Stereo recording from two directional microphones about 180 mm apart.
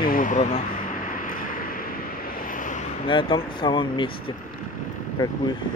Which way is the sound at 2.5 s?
45° left (ahead or behind).